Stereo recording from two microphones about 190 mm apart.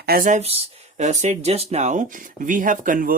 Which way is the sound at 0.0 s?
50° right (ahead or behind).